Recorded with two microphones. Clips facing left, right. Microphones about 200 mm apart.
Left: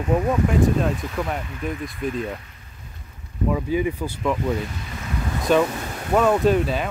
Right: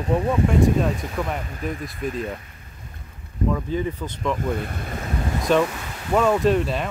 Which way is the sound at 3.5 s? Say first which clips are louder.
Left 4 dB; 10° left (ahead or behind).